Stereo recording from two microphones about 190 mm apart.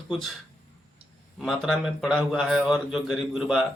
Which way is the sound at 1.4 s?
Centre (ahead or behind).